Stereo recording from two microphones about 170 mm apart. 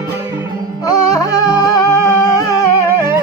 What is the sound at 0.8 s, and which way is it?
Music, 20° left (ahead or behind).